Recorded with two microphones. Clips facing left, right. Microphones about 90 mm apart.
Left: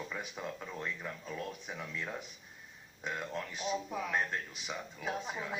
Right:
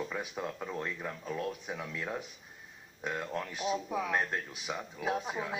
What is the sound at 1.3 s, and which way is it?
Speech, 5° right (ahead or behind).